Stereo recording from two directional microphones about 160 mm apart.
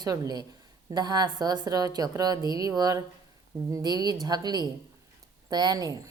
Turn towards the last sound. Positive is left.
turn(degrees=-25)  # may be behind; listen again after turning